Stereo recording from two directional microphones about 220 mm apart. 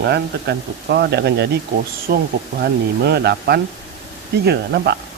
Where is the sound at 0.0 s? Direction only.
50° right (ahead or behind).